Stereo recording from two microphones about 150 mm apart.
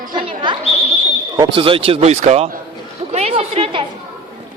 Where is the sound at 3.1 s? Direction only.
45° right (ahead or behind).